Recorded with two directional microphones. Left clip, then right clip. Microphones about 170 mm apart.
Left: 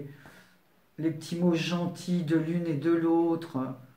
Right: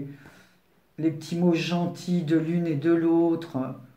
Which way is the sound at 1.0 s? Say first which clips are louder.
Right 4 dB; 25° right (ahead or behind).